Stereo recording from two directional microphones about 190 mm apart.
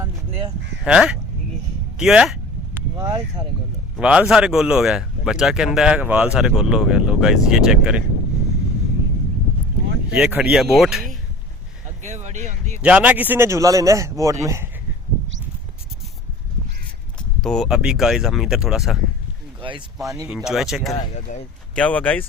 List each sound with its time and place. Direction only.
0.9 s speech: 5° right (ahead or behind)
2.0 s a sound: 5° right (ahead or behind)
3.0 s a man's voice: 15° right (ahead or behind)
3.9 s speech: 5° right (ahead or behind)
10.1 s speech: 5° right (ahead or behind)
12.0 s speech: 40° right (ahead or behind)
12.8 s a man's voice: 5° right (ahead or behind)
17.4 s speech: centre (ahead or behind)
20.2 s speech: 5° right (ahead or behind)
21.2 s speech: 40° left (ahead or behind)
21.8 s speech: 5° left (ahead or behind)